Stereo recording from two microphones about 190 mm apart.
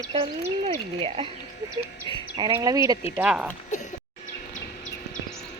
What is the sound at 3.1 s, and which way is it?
Speech, 5° right (ahead or behind).